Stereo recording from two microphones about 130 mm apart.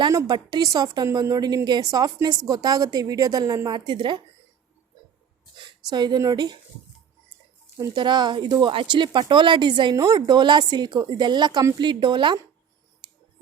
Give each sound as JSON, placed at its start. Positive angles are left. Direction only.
{"t": 0.1, "sound": "a woman's voice", "side_deg": -30}
{"t": 5.6, "sound": "speech", "side_deg": -35}
{"t": 7.9, "sound": "speech", "side_deg": -35}